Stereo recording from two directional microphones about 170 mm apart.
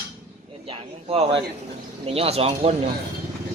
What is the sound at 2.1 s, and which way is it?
Speech, 35° right (ahead or behind).